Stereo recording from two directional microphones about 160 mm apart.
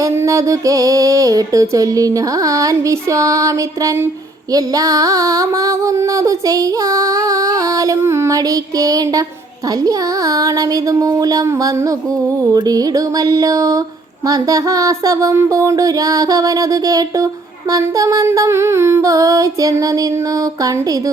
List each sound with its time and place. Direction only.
0.0 s music: 20° right (ahead or behind)